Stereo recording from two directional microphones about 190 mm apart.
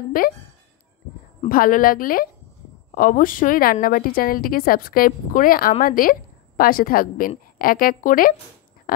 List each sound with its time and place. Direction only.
0.2 s a woman's voice: 45° left (ahead or behind)
1.5 s a woman's voice: 50° left (ahead or behind)